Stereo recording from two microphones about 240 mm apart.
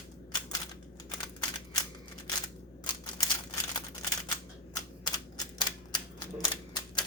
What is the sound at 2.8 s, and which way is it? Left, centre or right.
Typewriter, centre.